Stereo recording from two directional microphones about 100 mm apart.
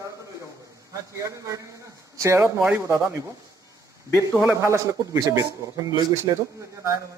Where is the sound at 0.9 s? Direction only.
35° right (ahead or behind).